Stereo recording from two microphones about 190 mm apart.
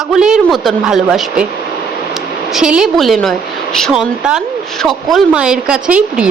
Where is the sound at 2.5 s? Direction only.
5° right (ahead or behind).